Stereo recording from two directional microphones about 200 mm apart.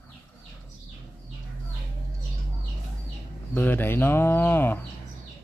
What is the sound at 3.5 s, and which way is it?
Speech, 10° left (ahead or behind).